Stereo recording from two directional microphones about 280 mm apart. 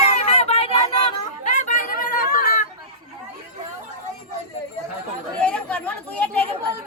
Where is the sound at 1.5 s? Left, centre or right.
Left.